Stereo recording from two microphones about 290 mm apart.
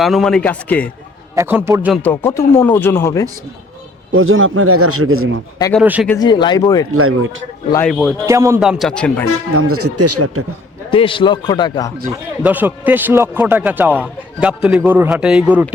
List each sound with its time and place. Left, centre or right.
0.0 s speech: centre
1.4 s a man's voice: centre
2.0 s speech: centre
4.1 s a man's voice: right
5.7 s speech: centre
6.1 s speech: centre
6.9 s a man's voice: right
7.7 s speech: centre
8.3 s speech: centre
9.6 s a man's voice: right
10.9 s speech: centre
12.4 s speech: centre